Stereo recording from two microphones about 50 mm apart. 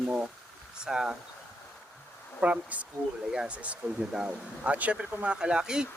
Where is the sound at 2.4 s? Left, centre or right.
Right.